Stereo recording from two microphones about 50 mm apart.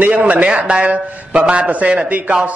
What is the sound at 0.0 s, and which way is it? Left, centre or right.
A man's voice, right.